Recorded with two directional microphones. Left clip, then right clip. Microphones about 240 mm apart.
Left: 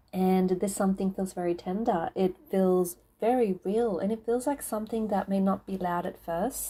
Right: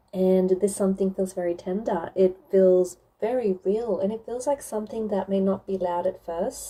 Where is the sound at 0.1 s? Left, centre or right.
Centre.